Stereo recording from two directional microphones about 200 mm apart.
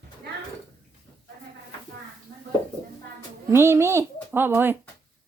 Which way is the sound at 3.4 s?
10° right (ahead or behind).